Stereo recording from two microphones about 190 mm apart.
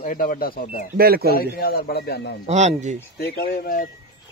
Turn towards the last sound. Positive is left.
turn(degrees=50)  # may be behind; listen again after turning